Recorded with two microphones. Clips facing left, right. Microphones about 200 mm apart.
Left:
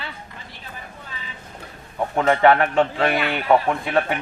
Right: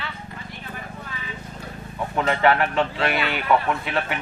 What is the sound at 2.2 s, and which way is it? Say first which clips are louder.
A man's voice: left 4 dB; 50° left (ahead or behind).